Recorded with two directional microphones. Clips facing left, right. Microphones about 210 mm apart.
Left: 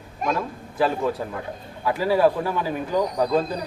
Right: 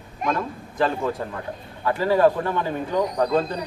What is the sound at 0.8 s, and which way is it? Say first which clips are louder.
Speech: left 1 dB; 5° left (ahead or behind).